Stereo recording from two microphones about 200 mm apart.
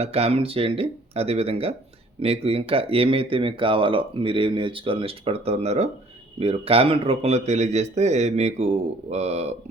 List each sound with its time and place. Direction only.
0.0 s a man's voice: 30° right (ahead or behind)